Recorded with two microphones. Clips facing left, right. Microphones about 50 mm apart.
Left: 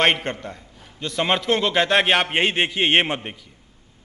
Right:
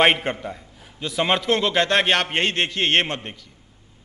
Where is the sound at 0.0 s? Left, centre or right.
Centre.